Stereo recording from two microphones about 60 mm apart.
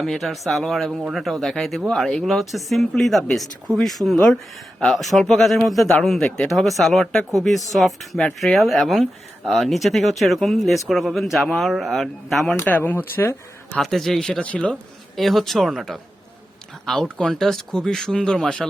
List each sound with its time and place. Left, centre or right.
0.0 s speech: centre
6.5 s speech: centre
12.6 s speech: left
13.7 s speech: centre
14.4 s speech: left
15.1 s speech: centre